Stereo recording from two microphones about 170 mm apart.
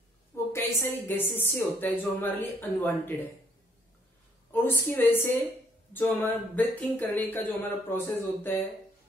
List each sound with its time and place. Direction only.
0.5 s a woman's voice: 10° left (ahead or behind)
4.5 s a woman's voice: 10° left (ahead or behind)